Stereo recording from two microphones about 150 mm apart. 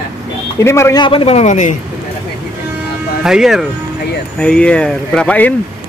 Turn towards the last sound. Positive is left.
turn(degrees=10)  # may be behind; listen again after turning